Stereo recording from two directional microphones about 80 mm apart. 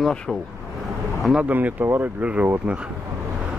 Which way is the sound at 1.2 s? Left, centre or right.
Centre.